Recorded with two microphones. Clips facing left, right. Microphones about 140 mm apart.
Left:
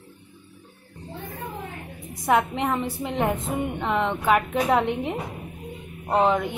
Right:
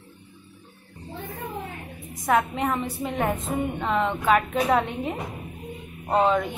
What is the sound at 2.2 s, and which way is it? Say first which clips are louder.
A woman's voice: left 1 dB; 20° left (ahead or behind).